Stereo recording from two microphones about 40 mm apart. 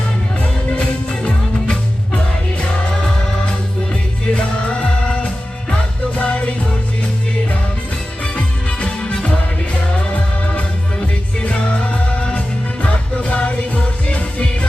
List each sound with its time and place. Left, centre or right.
0.3 s music: left
3.9 s music: left
8.2 s music: left
10.5 s music: left